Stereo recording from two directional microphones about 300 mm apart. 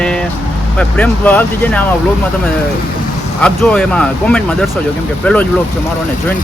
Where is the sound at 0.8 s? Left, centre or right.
Centre.